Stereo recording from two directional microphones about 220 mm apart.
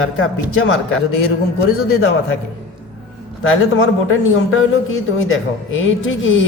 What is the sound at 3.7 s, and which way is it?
A man's voice, 65° left (ahead or behind).